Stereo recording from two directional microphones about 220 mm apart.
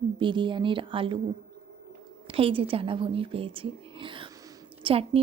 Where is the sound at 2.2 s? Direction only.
25° right (ahead or behind).